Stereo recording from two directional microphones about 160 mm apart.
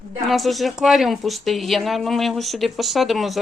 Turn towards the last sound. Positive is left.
turn(degrees=0)  # may be behind; listen again after turning